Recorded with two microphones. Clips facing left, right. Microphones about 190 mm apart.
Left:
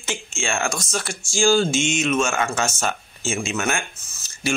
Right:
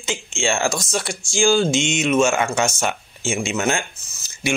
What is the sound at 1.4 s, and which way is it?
Speech, 15° right (ahead or behind).